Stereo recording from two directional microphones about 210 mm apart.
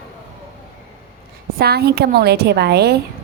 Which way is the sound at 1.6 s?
50° right (ahead or behind).